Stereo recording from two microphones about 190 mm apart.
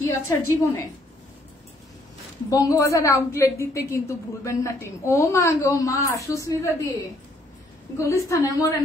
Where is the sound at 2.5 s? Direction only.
15° left (ahead or behind).